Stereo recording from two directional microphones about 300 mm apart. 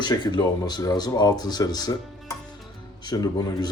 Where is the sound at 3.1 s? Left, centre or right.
Centre.